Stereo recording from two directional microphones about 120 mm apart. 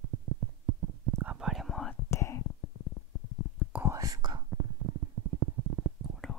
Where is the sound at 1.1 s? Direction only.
10° right (ahead or behind).